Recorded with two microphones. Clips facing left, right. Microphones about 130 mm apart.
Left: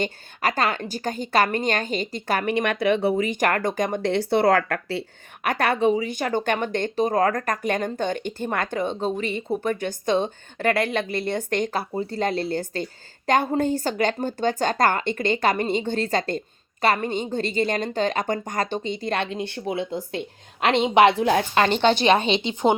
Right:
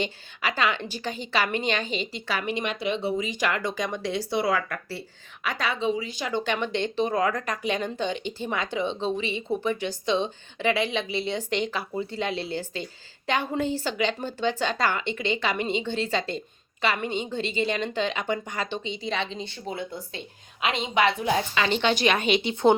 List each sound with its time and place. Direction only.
0.0 s a woman's voice: 45° left (ahead or behind)
21.8 s a woman's voice: 35° left (ahead or behind)
22.4 s speech: 20° left (ahead or behind)